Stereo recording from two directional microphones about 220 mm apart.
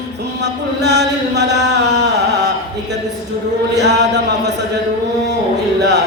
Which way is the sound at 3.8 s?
50° right (ahead or behind).